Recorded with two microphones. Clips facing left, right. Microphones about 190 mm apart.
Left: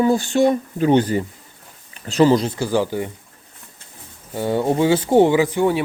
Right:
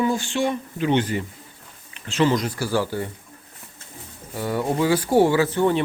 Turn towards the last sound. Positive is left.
turn(degrees=10)  # may be behind; listen again after turning